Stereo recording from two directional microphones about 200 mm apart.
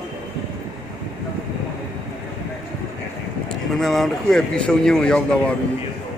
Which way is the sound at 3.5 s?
Centre (ahead or behind).